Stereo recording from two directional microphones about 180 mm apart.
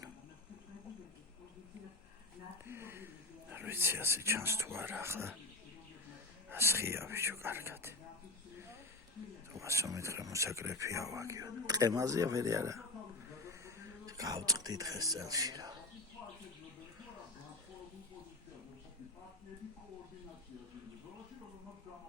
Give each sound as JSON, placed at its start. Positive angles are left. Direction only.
{"t": 2.6, "sound": "speech", "side_deg": -15}
{"t": 6.5, "sound": "speech", "side_deg": -15}
{"t": 9.5, "sound": "speech", "side_deg": -15}
{"t": 13.5, "sound": "a sound", "side_deg": -15}